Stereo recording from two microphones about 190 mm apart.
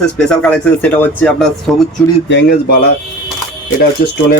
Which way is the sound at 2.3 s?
65° left (ahead or behind).